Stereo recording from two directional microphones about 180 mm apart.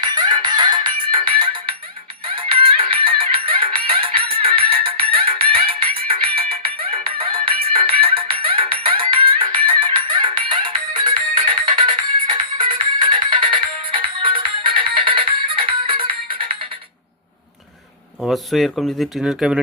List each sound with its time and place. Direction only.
0.0 s music: 25° right (ahead or behind)
18.2 s speech: centre (ahead or behind)